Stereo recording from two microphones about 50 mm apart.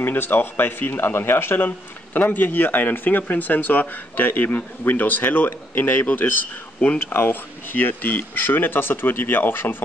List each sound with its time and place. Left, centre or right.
0.0 s speech: left
2.1 s speech: left